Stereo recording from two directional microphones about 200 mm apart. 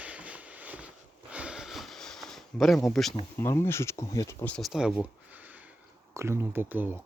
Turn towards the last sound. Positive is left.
turn(degrees=-10)  # may be behind; listen again after turning